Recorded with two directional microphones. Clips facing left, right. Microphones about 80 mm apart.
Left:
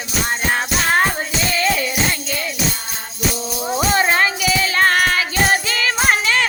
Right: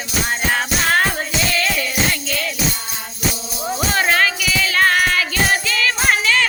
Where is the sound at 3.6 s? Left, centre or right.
Centre.